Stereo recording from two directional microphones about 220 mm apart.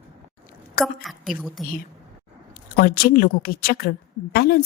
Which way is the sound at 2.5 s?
45° left (ahead or behind).